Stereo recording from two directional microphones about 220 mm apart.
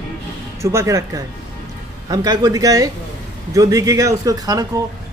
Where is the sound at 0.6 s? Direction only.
15° right (ahead or behind).